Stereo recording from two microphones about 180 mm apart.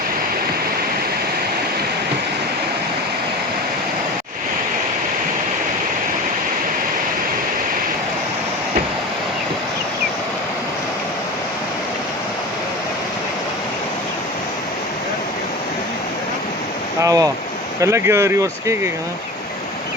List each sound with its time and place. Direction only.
17.0 s waterfall: 20° right (ahead or behind)
17.7 s speech: 15° right (ahead or behind)